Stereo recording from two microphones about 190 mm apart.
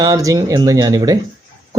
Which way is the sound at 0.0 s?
15° right (ahead or behind).